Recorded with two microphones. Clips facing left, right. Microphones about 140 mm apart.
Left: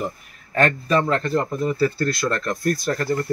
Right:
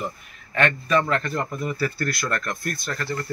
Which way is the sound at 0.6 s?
35° left (ahead or behind).